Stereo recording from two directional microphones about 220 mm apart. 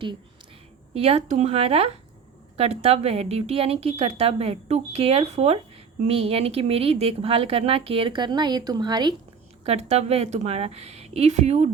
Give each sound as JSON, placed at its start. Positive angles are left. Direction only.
{"t": 0.9, "sound": "a woman's voice", "side_deg": -30}
{"t": 9.6, "sound": "a woman's voice", "side_deg": -30}